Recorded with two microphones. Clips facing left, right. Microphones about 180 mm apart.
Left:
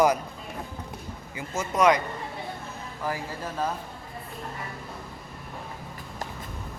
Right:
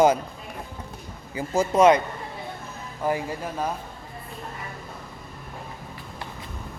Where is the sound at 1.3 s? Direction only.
30° right (ahead or behind).